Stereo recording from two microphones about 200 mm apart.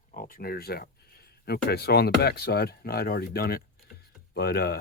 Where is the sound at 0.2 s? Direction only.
45° left (ahead or behind).